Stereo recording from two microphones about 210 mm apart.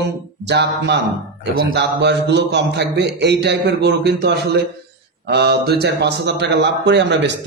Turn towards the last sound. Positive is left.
turn(degrees=-55)  # may be behind; listen again after turning